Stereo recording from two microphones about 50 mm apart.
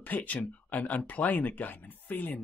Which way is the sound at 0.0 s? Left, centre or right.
Left.